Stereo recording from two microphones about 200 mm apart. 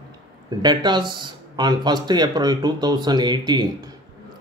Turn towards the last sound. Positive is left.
turn(degrees=-20)  # may be behind; listen again after turning